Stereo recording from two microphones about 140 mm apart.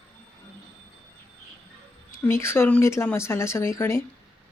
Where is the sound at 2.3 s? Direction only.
15° left (ahead or behind).